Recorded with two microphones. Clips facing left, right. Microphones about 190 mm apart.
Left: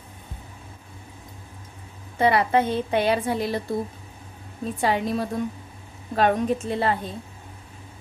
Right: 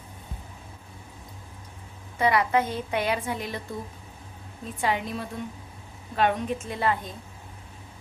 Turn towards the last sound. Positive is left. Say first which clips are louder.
# left 3 dB
turn(degrees=35)  # may be behind; listen again after turning